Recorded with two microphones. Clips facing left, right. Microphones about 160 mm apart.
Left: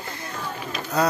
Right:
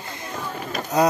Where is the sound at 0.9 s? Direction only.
20° right (ahead or behind).